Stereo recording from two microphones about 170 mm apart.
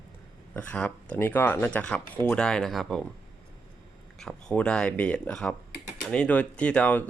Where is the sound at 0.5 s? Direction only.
10° left (ahead or behind).